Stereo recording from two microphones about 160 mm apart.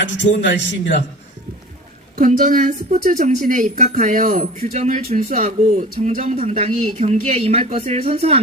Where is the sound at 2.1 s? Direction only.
60° right (ahead or behind).